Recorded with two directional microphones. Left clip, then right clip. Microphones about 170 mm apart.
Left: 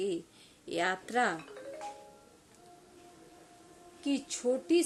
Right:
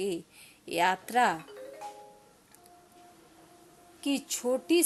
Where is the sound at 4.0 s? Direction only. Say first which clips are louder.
Right 2 dB; 20° right (ahead or behind).